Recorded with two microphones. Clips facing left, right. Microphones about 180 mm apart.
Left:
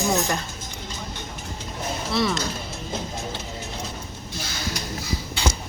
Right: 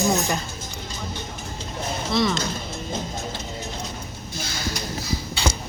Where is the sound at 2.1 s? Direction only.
5° left (ahead or behind).